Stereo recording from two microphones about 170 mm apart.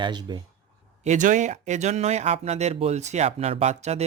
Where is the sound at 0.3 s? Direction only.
25° right (ahead or behind).